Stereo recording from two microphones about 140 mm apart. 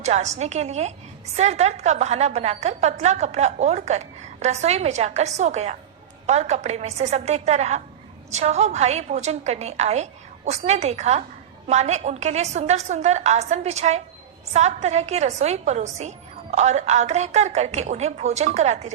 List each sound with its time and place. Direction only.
0.0 s a woman's voice: 55° right (ahead or behind)